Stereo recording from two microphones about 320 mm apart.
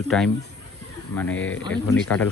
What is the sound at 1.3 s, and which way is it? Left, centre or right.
Speech, left.